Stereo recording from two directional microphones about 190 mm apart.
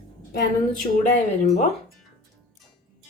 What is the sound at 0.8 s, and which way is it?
Speech, 40° left (ahead or behind).